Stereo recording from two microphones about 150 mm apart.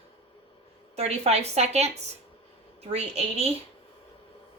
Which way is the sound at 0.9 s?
45° right (ahead or behind).